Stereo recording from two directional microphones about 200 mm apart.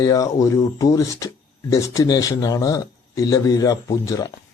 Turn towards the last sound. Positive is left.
turn(degrees=15)  # may be behind; listen again after turning